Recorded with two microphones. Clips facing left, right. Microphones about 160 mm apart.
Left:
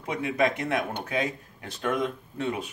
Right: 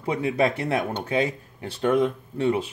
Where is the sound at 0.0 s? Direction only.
30° right (ahead or behind).